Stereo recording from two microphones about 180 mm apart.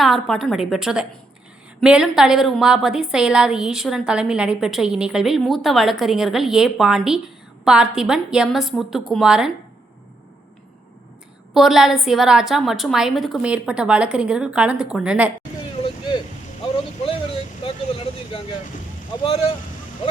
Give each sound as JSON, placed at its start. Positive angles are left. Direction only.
{"t": 0.0, "sound": "a woman's voice", "side_deg": 0}
{"t": 11.5, "sound": "a woman's voice", "side_deg": 0}
{"t": 17.6, "sound": "vehicle", "side_deg": 30}
{"t": 19.2, "sound": "speech", "side_deg": 35}